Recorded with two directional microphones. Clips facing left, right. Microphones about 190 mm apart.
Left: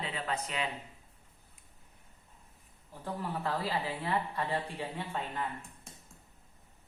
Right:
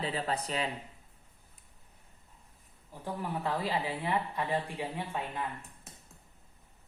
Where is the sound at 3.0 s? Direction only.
15° right (ahead or behind).